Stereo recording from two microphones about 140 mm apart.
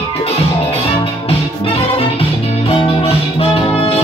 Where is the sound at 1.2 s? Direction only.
40° left (ahead or behind).